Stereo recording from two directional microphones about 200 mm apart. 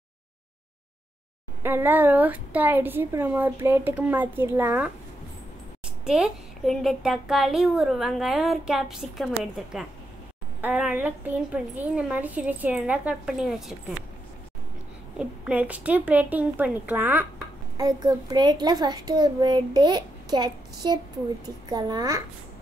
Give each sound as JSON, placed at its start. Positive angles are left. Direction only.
{"t": 1.6, "sound": "a woman's voice", "side_deg": -10}
{"t": 6.0, "sound": "a woman's voice", "side_deg": 0}
{"t": 15.1, "sound": "a woman's voice", "side_deg": -5}
{"t": 17.7, "sound": "a child's voice", "side_deg": -20}